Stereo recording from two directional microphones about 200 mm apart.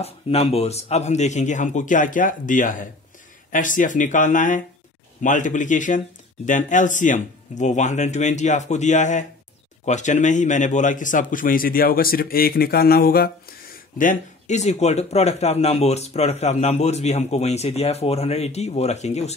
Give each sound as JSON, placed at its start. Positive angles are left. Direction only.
{"t": 0.0, "sound": "a man's voice", "side_deg": 30}
{"t": 13.9, "sound": "a man's voice", "side_deg": 40}